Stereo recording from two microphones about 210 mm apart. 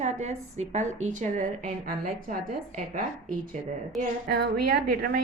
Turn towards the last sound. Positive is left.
turn(degrees=-45)  # may be behind; listen again after turning